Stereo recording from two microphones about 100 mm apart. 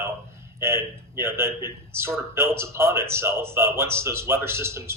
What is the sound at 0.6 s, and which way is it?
Speech, 25° right (ahead or behind).